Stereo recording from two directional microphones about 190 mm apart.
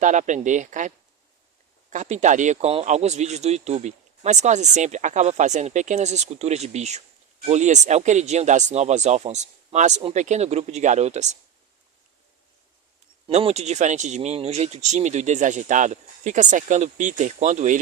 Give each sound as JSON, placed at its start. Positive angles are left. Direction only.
{"t": 0.0, "sound": "speech", "side_deg": -40}
{"t": 13.2, "sound": "speech", "side_deg": -30}